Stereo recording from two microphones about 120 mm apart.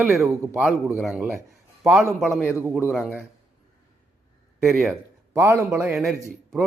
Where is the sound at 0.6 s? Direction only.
5° right (ahead or behind).